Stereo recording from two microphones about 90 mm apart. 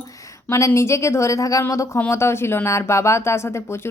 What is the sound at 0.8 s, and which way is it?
Speech, 30° left (ahead or behind).